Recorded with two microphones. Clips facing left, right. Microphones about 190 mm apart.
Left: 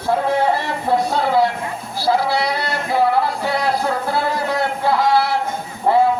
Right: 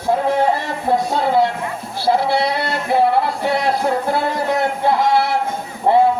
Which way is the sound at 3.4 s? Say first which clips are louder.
Right 2 dB; 25° right (ahead or behind).